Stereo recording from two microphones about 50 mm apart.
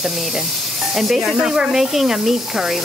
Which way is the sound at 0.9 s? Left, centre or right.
Centre.